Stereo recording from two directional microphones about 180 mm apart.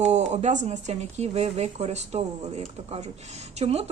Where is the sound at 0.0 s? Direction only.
40° right (ahead or behind).